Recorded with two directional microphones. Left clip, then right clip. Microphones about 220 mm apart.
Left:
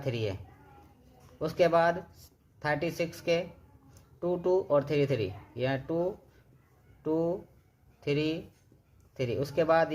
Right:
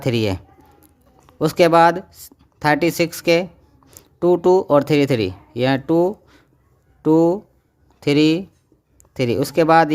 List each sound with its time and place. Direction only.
0.0 s speech: 45° right (ahead or behind)
1.4 s speech: 50° right (ahead or behind)